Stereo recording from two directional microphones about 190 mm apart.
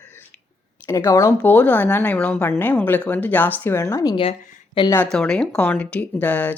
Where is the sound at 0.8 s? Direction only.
15° left (ahead or behind).